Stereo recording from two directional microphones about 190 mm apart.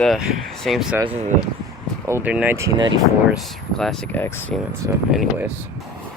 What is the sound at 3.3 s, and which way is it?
Speech, centre (ahead or behind).